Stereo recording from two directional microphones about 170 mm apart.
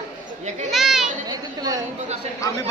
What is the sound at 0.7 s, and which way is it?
Speech, centre (ahead or behind).